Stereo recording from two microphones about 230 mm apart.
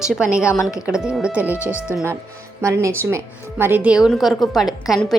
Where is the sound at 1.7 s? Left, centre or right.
Centre.